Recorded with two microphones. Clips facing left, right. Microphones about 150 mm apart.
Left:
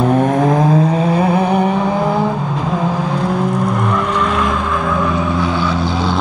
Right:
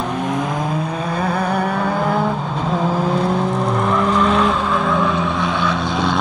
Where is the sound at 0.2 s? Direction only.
45° left (ahead or behind).